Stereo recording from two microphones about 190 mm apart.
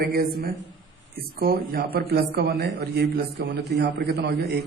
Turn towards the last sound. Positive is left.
turn(degrees=-55)  # may be behind; listen again after turning